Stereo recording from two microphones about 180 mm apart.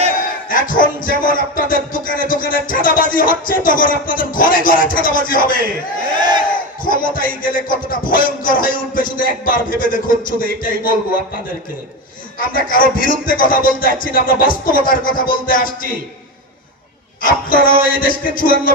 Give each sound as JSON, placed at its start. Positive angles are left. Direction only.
{"t": 0.5, "sound": "music", "side_deg": 50}
{"t": 6.1, "sound": "battle cry", "side_deg": -25}
{"t": 6.8, "sound": "music", "side_deg": 50}
{"t": 12.4, "sound": "music", "side_deg": 50}
{"t": 17.2, "sound": "music", "side_deg": 50}